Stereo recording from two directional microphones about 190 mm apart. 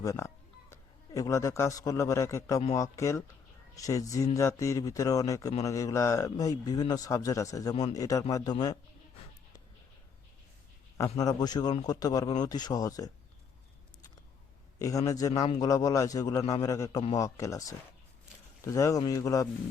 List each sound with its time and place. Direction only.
0.0 s a man's voice: 15° left (ahead or behind)
11.2 s a man's voice: 20° left (ahead or behind)
14.8 s a man's voice: 15° left (ahead or behind)